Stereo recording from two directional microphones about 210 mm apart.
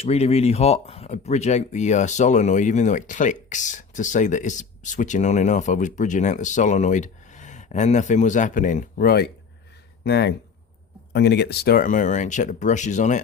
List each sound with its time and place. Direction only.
0.0 s speech: 30° left (ahead or behind)